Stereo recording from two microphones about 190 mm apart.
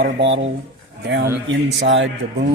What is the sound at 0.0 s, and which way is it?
A man's voice, 70° right (ahead or behind).